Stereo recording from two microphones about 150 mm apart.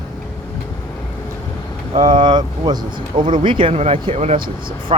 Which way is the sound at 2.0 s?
30° right (ahead or behind).